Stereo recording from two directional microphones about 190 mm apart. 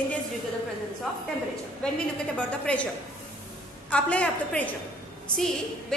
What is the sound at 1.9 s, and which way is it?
Speech, 5° left (ahead or behind).